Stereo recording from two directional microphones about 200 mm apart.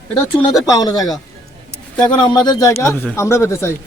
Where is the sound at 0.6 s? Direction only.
20° left (ahead or behind).